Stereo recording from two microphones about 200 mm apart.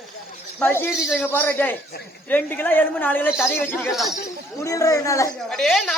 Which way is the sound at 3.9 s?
Centre (ahead or behind).